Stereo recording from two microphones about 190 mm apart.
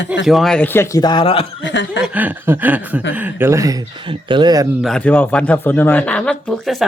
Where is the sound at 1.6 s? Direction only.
70° left (ahead or behind).